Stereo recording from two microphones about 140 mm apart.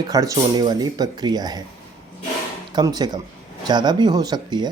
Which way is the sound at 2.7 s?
30° right (ahead or behind).